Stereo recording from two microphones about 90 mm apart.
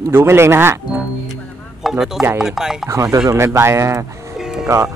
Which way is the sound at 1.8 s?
5° right (ahead or behind).